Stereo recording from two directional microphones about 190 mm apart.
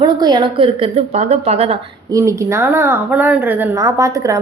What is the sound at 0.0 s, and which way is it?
A woman's voice, 20° right (ahead or behind).